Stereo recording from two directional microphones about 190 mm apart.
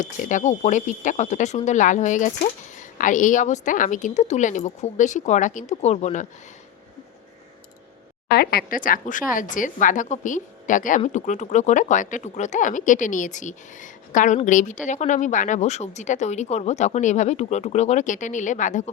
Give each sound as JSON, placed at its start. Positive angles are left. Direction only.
{"t": 0.0, "sound": "speech", "side_deg": 40}
{"t": 8.3, "sound": "speech", "side_deg": 55}